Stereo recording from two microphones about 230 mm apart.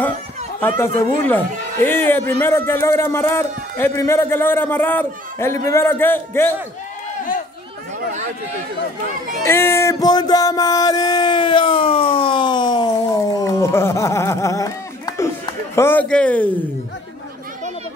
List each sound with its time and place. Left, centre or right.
0.6 s a man's voice: centre
9.4 s music: centre